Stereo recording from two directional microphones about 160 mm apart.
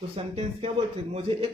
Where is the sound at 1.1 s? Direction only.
40° right (ahead or behind).